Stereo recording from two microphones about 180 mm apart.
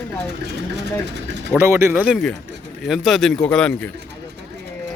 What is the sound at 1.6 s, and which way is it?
Speech, 15° right (ahead or behind).